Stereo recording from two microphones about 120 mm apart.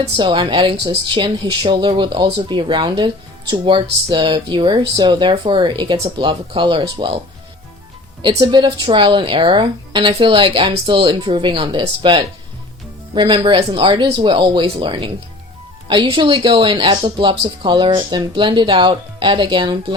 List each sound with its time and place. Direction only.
0.2 s a woman's voice: 40° right (ahead or behind)
8.4 s a woman's voice: 40° right (ahead or behind)